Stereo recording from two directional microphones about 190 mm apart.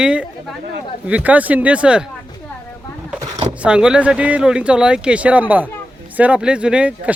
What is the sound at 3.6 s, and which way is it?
Speech, 5° right (ahead or behind).